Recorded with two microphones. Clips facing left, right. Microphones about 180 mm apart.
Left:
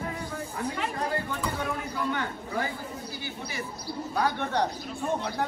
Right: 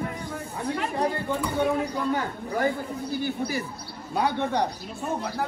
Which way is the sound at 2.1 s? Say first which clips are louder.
Right 4 dB; 35° right (ahead or behind).